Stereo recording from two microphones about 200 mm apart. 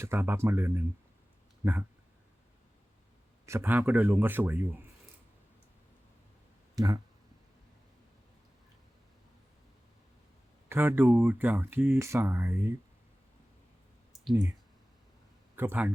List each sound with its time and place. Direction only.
0.0 s speech: 10° right (ahead or behind)
3.4 s speech: 15° right (ahead or behind)
6.7 s speech: 20° right (ahead or behind)
10.7 s speech: 10° right (ahead or behind)
15.5 s speech: 10° right (ahead or behind)